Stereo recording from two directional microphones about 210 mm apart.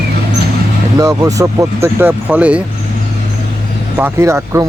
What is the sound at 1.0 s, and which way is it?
Speech, 15° right (ahead or behind).